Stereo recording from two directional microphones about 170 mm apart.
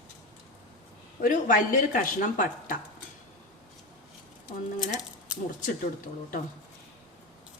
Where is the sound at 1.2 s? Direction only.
50° left (ahead or behind).